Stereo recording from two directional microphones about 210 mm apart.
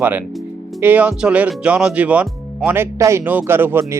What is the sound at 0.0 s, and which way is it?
Speech, 10° right (ahead or behind).